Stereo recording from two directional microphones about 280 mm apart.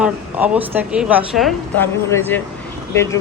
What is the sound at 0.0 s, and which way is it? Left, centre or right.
A woman's voice, centre.